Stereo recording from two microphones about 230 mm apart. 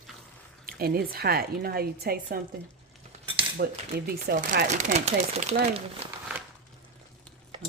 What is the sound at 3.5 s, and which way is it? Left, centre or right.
Speech, right.